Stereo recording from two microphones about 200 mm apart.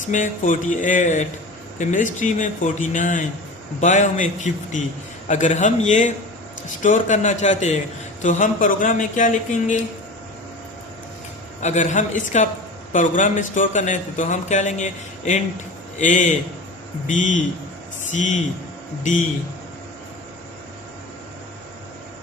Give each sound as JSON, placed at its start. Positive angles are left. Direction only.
{"t": 0.1, "sound": "a man's voice", "side_deg": 40}
{"t": 11.6, "sound": "a man's voice", "side_deg": 35}